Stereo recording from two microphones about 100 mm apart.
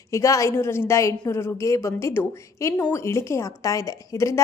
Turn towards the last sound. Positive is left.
turn(degrees=30)  # may be behind; listen again after turning